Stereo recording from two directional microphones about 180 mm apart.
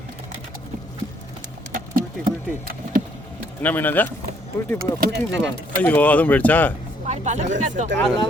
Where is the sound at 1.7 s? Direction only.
50° right (ahead or behind).